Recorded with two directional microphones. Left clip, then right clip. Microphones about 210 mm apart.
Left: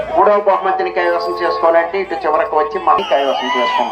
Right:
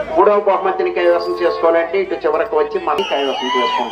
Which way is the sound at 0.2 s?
45° left (ahead or behind).